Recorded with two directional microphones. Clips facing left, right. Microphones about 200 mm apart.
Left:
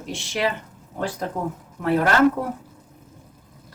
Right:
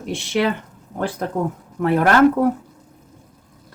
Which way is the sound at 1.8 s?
55° right (ahead or behind).